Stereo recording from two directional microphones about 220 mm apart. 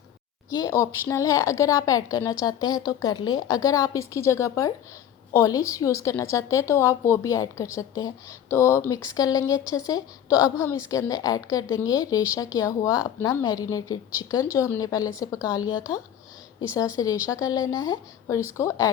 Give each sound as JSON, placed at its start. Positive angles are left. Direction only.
{"t": 0.5, "sound": "a woman's voice", "side_deg": 15}